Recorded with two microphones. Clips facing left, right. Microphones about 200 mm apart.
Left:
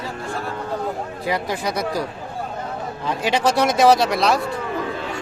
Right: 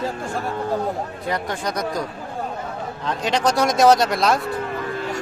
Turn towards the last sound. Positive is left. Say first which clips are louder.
# even
turn(degrees=0)  # may be behind; listen again after turning